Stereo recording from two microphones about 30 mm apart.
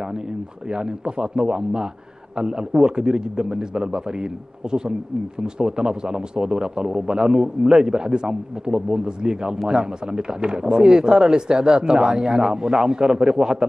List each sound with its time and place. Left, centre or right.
0.7 s a man's voice: right